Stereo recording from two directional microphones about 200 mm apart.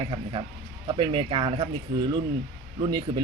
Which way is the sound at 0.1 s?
25° right (ahead or behind).